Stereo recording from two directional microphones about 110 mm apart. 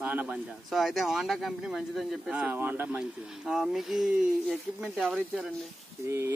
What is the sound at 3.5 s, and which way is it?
Speech, 5° right (ahead or behind).